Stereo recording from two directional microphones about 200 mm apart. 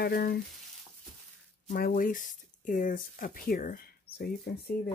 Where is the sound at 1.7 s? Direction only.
45° left (ahead or behind).